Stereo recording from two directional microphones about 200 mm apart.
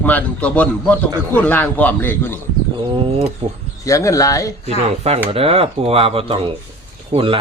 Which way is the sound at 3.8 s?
15° left (ahead or behind).